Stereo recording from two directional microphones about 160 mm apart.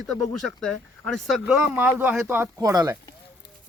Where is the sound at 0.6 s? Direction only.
5° left (ahead or behind).